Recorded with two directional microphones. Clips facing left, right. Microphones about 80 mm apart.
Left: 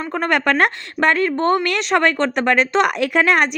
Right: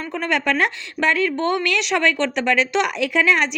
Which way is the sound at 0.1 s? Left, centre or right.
Left.